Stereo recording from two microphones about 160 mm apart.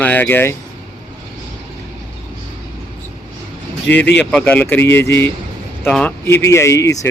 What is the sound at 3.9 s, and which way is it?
Speech, 10° left (ahead or behind).